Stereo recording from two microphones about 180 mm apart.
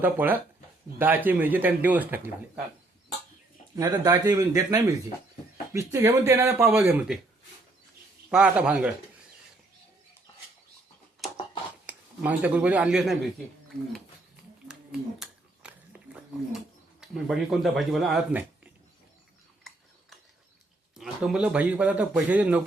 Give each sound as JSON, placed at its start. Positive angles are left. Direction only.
{"t": 0.0, "sound": "a man's voice", "side_deg": -10}
{"t": 3.8, "sound": "a man's voice", "side_deg": -20}
{"t": 8.3, "sound": "a man's voice", "side_deg": -5}
{"t": 11.9, "sound": "speech", "side_deg": -10}
{"t": 15.2, "sound": "a sound", "side_deg": -5}
{"t": 20.9, "sound": "a man's voice", "side_deg": -5}